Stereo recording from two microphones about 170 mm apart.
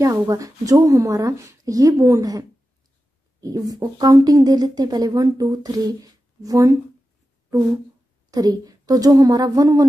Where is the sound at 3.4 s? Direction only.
20° right (ahead or behind).